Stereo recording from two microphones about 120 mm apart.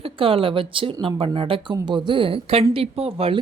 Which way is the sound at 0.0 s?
50° right (ahead or behind).